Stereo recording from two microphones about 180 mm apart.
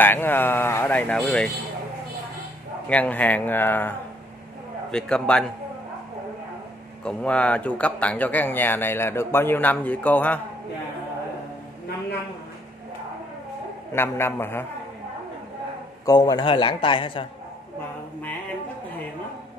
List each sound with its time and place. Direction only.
0.0 s speech: 10° left (ahead or behind)
2.9 s speech: 10° left (ahead or behind)
4.9 s a man's voice: 5° left (ahead or behind)
7.1 s speech: 5° left (ahead or behind)
13.9 s speech: 15° left (ahead or behind)
16.1 s a man's voice: 20° left (ahead or behind)